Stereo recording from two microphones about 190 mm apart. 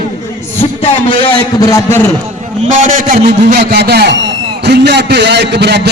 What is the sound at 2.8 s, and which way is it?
A man's voice, 45° right (ahead or behind).